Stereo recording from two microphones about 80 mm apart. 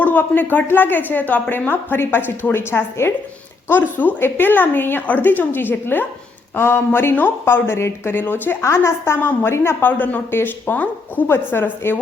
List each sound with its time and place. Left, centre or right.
0.0 s a woman's voice: left